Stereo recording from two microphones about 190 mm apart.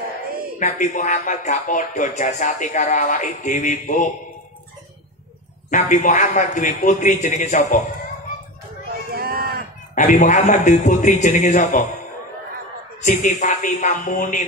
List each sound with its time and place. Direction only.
0.6 s speech: 40° left (ahead or behind)
5.7 s speech: 40° left (ahead or behind)
9.1 s a sound: 50° right (ahead or behind)
9.9 s speech: 40° left (ahead or behind)
13.0 s speech: 40° left (ahead or behind)